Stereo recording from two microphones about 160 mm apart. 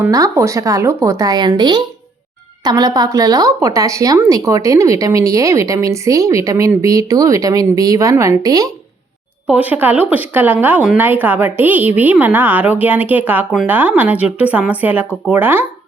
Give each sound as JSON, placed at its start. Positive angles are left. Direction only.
{"t": 0.0, "sound": "speech", "side_deg": -20}
{"t": 9.5, "sound": "speech", "side_deg": -10}